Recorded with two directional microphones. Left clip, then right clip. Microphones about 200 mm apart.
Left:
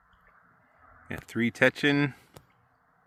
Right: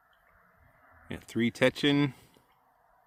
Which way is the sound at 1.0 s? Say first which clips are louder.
Left 1 dB; centre (ahead or behind).